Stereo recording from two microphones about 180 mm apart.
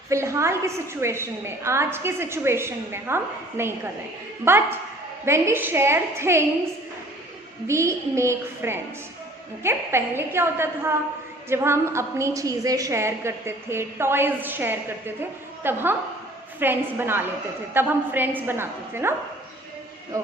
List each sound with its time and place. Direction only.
0.1 s a woman's voice: 15° right (ahead or behind)
7.7 s a woman's voice: 15° right (ahead or behind)